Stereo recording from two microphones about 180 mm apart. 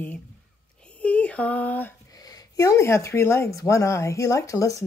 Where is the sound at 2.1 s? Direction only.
20° left (ahead or behind).